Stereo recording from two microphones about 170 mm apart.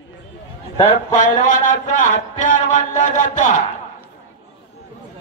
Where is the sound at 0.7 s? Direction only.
40° left (ahead or behind).